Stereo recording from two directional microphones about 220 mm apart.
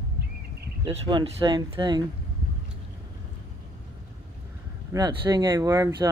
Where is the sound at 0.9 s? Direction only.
25° right (ahead or behind).